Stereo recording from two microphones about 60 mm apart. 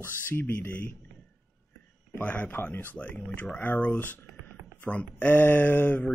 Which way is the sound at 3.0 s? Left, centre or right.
Left.